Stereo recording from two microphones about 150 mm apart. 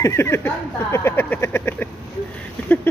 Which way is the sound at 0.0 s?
20° left (ahead or behind).